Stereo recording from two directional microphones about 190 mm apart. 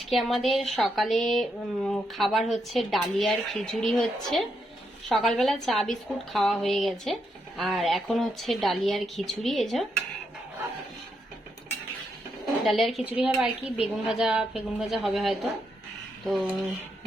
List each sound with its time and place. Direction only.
0.0 s a woman's voice: centre (ahead or behind)
5.0 s a woman's voice: centre (ahead or behind)
12.6 s a woman's voice: centre (ahead or behind)